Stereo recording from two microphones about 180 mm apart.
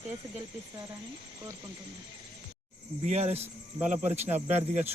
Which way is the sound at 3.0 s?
40° right (ahead or behind).